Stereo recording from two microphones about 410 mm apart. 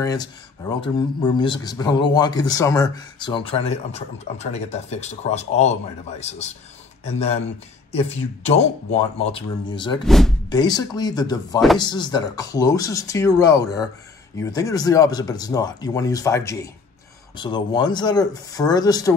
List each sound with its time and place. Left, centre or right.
0.0 s speech: centre
8.5 s speech: centre